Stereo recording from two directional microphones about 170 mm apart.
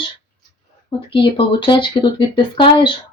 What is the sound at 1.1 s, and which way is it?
Speech, 30° left (ahead or behind).